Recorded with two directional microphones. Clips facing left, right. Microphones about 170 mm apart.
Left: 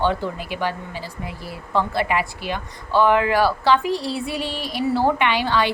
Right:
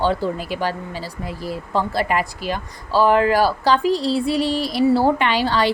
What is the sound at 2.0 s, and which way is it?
A woman's voice, 40° right (ahead or behind).